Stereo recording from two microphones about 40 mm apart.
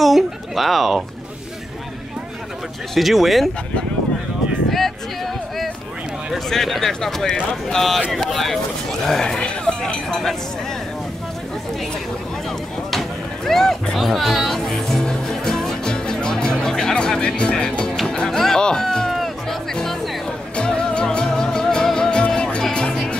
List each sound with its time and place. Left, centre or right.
0.0 s speech: centre
2.9 s speech: centre
4.7 s a sound: centre
6.3 s speech: centre
9.0 s speech: centre
13.5 s speech: centre
13.9 s music: centre; by 17.3 s left
17.4 s speech: left
18.0 s music: centre
18.6 s speech: centre
19.7 s music: centre